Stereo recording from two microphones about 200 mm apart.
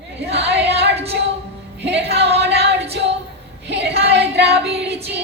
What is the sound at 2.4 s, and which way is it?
Music, 60° right (ahead or behind).